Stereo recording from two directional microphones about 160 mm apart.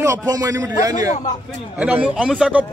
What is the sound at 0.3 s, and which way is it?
Speech, 20° right (ahead or behind).